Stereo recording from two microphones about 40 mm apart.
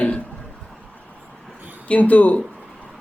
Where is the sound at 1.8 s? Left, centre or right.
Left.